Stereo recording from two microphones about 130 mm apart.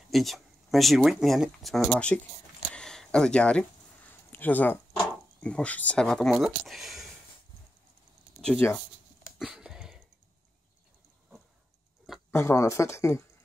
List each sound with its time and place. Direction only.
0.1 s speech: centre (ahead or behind)
2.7 s a sound: 5° left (ahead or behind)
5.4 s speech: 10° left (ahead or behind)
6.3 s speech: 5° right (ahead or behind)
8.6 s speech: 20° left (ahead or behind)
9.4 s a sound: 5° right (ahead or behind)
12.3 s speech: 20° left (ahead or behind)